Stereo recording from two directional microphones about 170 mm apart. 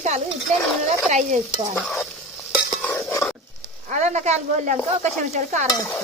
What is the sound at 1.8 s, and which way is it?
Stir, centre (ahead or behind).